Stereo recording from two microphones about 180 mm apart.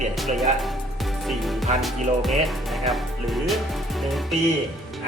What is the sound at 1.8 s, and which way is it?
Music, centre (ahead or behind).